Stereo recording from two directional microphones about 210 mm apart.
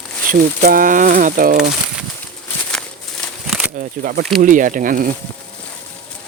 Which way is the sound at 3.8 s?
40° right (ahead or behind).